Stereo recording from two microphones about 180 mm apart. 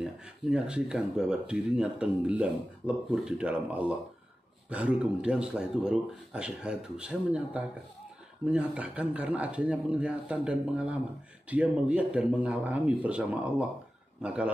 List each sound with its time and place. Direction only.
0.0 s speech: 5° right (ahead or behind)